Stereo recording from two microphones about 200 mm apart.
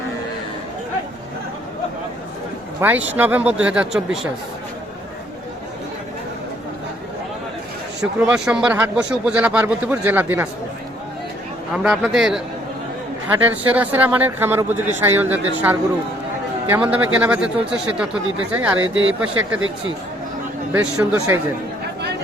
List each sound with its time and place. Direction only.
2.8 s speech: 10° right (ahead or behind)
8.0 s speech: 5° right (ahead or behind)
11.7 s speech: 5° right (ahead or behind)
13.4 s speech: 10° right (ahead or behind)
18.8 s speech: 75° right (ahead or behind)
20.7 s speech: 5° right (ahead or behind)